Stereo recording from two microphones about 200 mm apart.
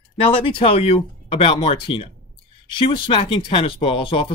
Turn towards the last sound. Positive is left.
turn(degrees=25)  # may be behind; listen again after turning